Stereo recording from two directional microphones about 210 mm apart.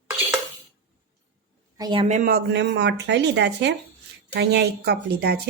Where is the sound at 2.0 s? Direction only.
40° right (ahead or behind).